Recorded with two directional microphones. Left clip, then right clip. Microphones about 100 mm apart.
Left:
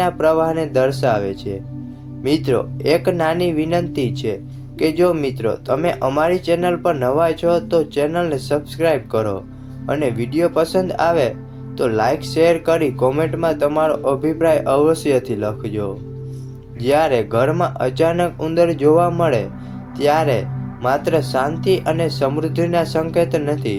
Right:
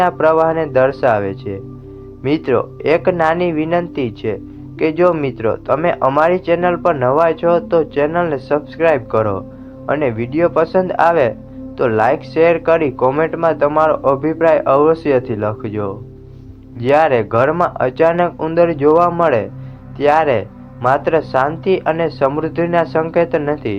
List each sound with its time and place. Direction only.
0.0 s speech: 35° left (ahead or behind)